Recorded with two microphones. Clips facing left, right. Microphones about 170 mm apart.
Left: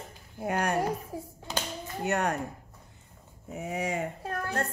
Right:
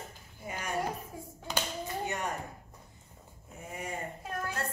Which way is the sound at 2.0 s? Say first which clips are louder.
Left 10 dB; 70° left (ahead or behind).